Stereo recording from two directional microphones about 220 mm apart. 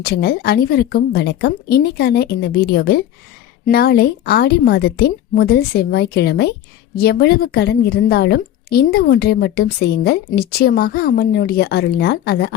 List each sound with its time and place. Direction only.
0.0 s a woman's voice: 45° left (ahead or behind)